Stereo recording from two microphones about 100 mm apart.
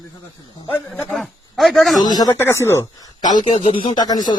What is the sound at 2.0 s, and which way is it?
Speech, 40° left (ahead or behind).